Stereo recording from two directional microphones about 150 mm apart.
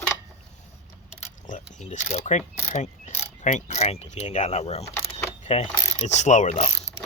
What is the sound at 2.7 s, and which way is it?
Mechanisms, 55° left (ahead or behind).